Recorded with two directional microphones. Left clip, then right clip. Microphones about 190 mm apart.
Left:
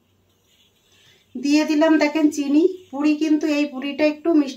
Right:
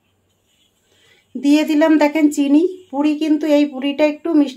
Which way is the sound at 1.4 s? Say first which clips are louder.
Right 3 dB; 55° right (ahead or behind).